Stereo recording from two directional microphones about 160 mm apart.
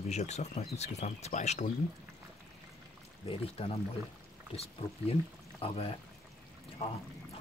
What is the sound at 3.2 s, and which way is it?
Speech, 35° left (ahead or behind).